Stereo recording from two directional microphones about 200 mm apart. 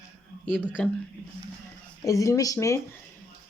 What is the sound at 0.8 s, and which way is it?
Speech, 5° left (ahead or behind).